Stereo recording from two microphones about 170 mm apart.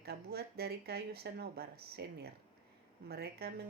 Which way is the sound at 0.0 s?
70° right (ahead or behind).